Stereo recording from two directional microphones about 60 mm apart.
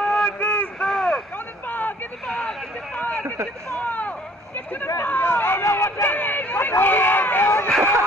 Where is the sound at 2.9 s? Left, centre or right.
Left.